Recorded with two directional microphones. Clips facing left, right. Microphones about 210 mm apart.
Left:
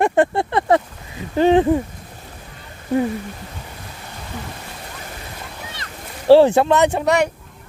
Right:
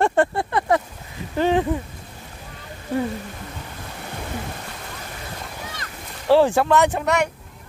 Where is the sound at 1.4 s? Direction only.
25° left (ahead or behind).